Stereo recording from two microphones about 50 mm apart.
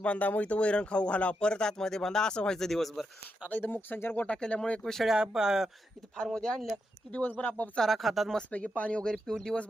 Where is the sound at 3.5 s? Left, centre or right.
Left.